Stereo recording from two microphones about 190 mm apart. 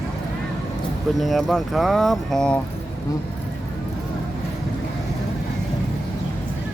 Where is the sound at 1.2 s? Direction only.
Centre (ahead or behind).